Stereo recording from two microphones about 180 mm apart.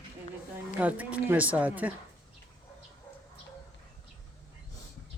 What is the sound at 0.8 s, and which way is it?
A woman's voice, 10° right (ahead or behind).